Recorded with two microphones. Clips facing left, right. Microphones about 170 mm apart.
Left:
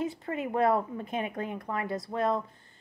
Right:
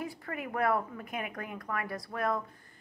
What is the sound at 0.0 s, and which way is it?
A woman's voice, 25° left (ahead or behind).